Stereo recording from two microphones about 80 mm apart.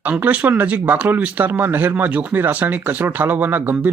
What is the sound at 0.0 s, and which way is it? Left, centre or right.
Speech, centre.